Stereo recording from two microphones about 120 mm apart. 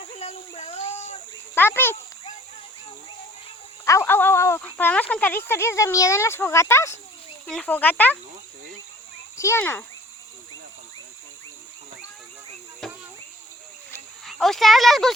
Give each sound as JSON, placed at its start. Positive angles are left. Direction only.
{"t": 0.1, "sound": "a sound", "side_deg": 60}
{"t": 1.5, "sound": "speech", "side_deg": 20}
{"t": 3.8, "sound": "speech", "side_deg": 20}
{"t": 7.4, "sound": "speech", "side_deg": 10}
{"t": 9.4, "sound": "speech", "side_deg": 20}
{"t": 12.8, "sound": "cricket", "side_deg": 5}
{"t": 14.3, "sound": "speech", "side_deg": 0}